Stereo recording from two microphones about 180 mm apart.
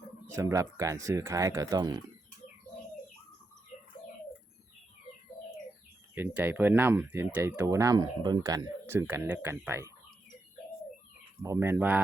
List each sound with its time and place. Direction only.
0.3 s speech: 15° right (ahead or behind)
6.1 s speech: 10° right (ahead or behind)
11.4 s speech: 15° right (ahead or behind)